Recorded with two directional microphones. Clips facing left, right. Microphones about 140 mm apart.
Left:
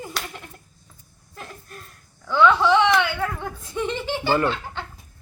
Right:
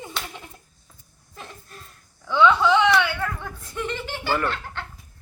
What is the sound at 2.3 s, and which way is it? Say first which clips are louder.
Speech: left 1 dB; centre (ahead or behind).